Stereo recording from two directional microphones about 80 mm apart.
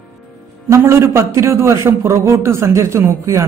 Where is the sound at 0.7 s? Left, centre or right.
Right.